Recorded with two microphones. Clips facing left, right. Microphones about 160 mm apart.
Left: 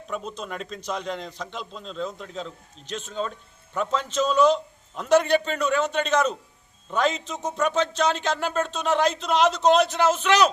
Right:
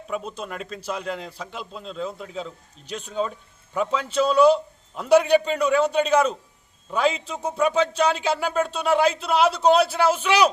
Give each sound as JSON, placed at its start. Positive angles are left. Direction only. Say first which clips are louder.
{"t": 0.1, "sound": "speech", "louder": "right 2 dB", "side_deg": -5}